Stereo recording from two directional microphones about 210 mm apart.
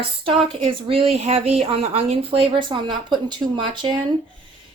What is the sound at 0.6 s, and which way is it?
Speech, 25° right (ahead or behind).